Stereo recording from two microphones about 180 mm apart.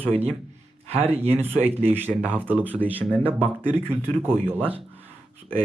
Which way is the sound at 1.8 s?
10° right (ahead or behind).